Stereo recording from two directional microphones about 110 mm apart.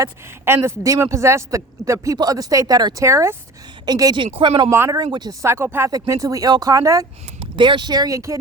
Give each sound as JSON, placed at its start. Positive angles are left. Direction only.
{"t": 0.0, "sound": "a man's voice", "side_deg": -25}
{"t": 4.4, "sound": "speech", "side_deg": -45}
{"t": 4.7, "sound": "a man's voice", "side_deg": -20}
{"t": 5.1, "sound": "speech", "side_deg": -40}
{"t": 5.4, "sound": "a man's voice", "side_deg": -25}
{"t": 7.5, "sound": "speech", "side_deg": -45}